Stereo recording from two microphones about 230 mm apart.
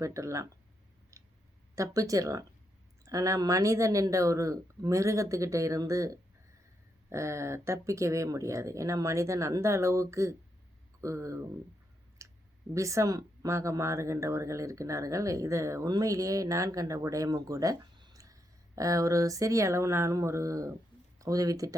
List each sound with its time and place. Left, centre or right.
0.0 s speech: centre
1.1 s a sound: centre
1.7 s speech: centre
12.2 s clicking: centre
12.7 s speech: centre